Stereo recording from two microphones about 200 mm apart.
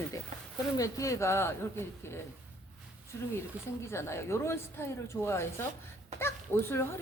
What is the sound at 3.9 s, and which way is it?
A woman's voice, 15° left (ahead or behind).